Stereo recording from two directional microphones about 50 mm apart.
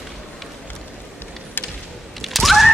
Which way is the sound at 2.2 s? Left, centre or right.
Centre.